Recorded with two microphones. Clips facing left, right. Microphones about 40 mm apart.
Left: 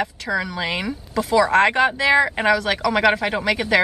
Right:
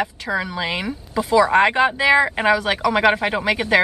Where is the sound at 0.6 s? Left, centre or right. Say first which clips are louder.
Even; centre.